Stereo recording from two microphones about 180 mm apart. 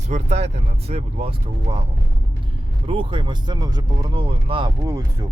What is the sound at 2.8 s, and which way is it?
Speech, 30° right (ahead or behind).